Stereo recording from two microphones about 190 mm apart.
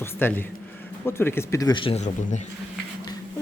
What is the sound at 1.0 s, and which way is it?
Speech, 10° left (ahead or behind).